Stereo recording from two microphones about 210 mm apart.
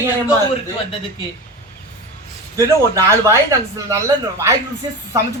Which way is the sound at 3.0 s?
15° right (ahead or behind).